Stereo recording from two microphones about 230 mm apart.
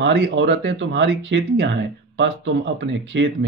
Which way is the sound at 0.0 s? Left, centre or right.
Right.